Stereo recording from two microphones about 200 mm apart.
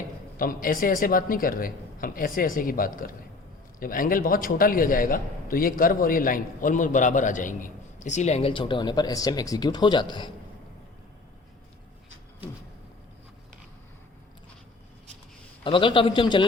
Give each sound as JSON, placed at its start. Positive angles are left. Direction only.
{"t": 0.3, "sound": "a man's voice", "side_deg": 45}
{"t": 15.6, "sound": "a man's voice", "side_deg": 25}